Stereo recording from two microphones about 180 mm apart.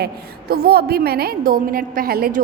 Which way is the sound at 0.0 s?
60° right (ahead or behind).